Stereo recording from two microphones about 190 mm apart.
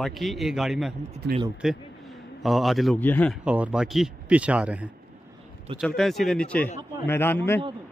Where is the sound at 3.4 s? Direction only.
5° right (ahead or behind).